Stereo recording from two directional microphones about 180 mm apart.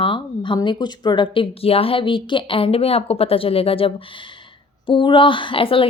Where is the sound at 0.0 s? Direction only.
25° left (ahead or behind).